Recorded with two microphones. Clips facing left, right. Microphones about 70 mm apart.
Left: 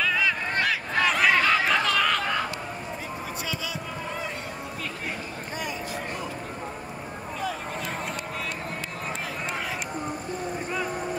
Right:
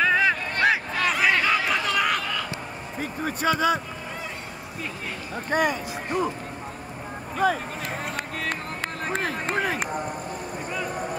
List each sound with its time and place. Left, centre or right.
0.0 s boat: right
1.0 s chatter: centre
3.0 s basketball bounce: right
5.5 s speech: right
7.3 s speech: right
9.0 s run: right